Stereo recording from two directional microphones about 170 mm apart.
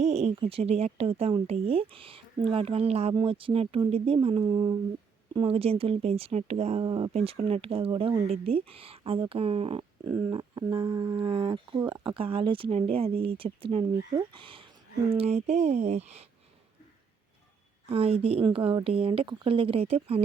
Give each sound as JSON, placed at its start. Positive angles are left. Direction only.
{"t": 0.0, "sound": "speech", "side_deg": -40}
{"t": 17.8, "sound": "speech", "side_deg": -35}